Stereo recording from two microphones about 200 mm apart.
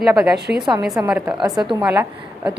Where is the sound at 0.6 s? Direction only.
20° right (ahead or behind).